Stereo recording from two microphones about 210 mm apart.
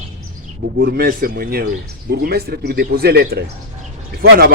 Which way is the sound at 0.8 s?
50° right (ahead or behind).